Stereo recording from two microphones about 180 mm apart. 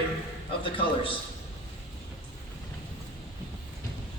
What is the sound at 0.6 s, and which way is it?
Speech, 30° left (ahead or behind).